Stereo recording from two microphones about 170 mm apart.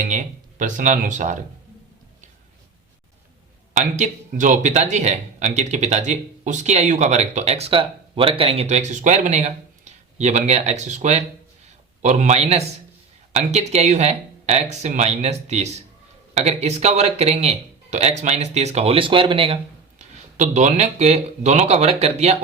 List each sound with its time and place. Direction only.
0.1 s a sound: 45° right (ahead or behind)
3.8 s speech: 45° right (ahead or behind)
20.0 s speech: 45° right (ahead or behind)